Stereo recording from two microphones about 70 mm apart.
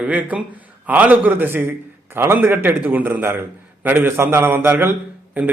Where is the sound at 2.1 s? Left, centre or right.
Right.